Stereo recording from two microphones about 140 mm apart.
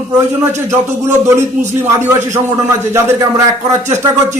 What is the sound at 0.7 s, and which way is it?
A man's voice, 20° right (ahead or behind).